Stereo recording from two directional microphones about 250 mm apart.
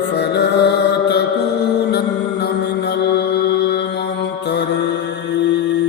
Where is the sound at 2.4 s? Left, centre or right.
Left.